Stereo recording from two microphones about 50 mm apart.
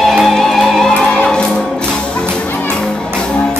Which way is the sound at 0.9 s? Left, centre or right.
Centre.